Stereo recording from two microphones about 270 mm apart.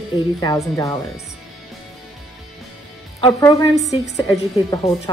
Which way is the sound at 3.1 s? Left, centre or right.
Centre.